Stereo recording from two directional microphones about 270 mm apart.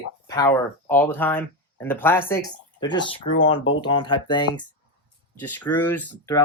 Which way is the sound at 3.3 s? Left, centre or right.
Left.